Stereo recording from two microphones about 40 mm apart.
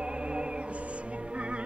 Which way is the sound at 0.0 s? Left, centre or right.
Right.